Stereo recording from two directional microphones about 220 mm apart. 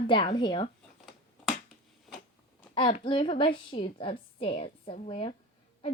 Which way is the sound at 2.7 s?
20° left (ahead or behind).